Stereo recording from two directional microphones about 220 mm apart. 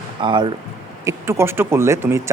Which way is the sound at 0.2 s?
20° right (ahead or behind).